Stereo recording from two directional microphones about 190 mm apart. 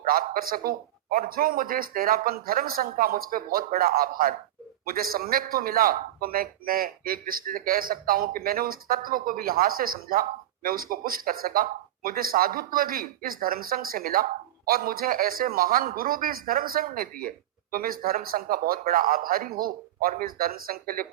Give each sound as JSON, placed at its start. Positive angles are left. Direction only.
{"t": 0.0, "sound": "a man's voice", "side_deg": -50}